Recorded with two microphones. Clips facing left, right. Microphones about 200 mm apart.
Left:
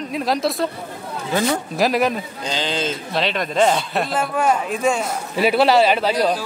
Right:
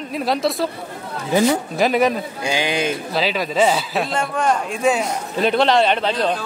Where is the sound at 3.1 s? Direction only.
5° right (ahead or behind).